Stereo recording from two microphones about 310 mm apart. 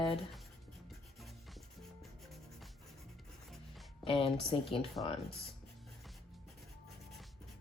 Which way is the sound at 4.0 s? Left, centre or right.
Centre.